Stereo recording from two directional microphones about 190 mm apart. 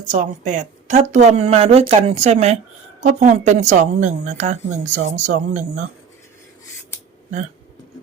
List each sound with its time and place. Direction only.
0.1 s a woman's voice: 40° right (ahead or behind)